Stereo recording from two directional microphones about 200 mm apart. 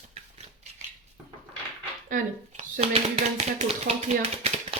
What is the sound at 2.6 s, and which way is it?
Speech, 30° right (ahead or behind).